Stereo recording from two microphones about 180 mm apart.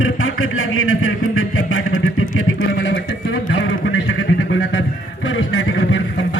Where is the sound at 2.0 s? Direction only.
90° left.